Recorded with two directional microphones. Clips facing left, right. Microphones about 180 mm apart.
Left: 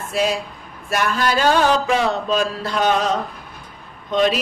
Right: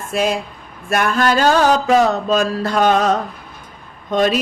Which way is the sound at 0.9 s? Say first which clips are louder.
Right 4 dB; 50° right (ahead or behind).